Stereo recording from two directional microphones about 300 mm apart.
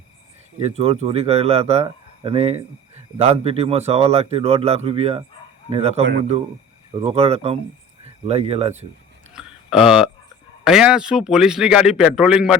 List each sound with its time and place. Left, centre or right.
0.8 s a man's voice: centre
9.3 s a sound: centre
10.6 s speech: centre